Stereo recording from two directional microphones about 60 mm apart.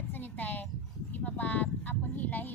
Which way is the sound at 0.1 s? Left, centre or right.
Left.